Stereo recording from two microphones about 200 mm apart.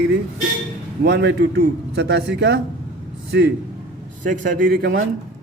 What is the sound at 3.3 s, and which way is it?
Speech, 55° right (ahead or behind).